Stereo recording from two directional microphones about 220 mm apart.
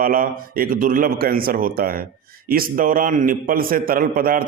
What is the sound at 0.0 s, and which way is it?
A man's voice, 40° right (ahead or behind).